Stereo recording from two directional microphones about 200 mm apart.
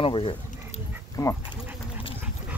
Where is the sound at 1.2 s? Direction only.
15° left (ahead or behind).